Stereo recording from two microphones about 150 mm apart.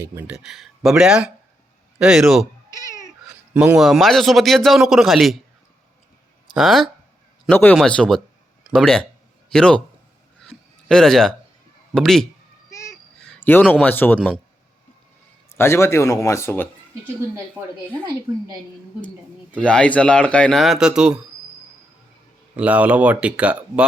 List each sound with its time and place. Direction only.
0.0 s speech: 20° right (ahead or behind)
0.3 s a man's voice: 5° right (ahead or behind)
2.7 s cat: 20° left (ahead or behind)
3.5 s a man's voice: 10° right (ahead or behind)
6.5 s speech: centre (ahead or behind)
7.4 s a man's voice: 10° left (ahead or behind)
10.4 s a sound: 5° left (ahead or behind)
11.9 s a man's voice: centre (ahead or behind)
15.5 s speech: 15° left (ahead or behind)
19.0 s speech: 10° left (ahead or behind)
22.5 s speech: 10° right (ahead or behind)